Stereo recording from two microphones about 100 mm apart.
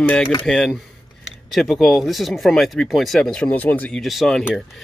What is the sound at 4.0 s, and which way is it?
Speech, centre (ahead or behind).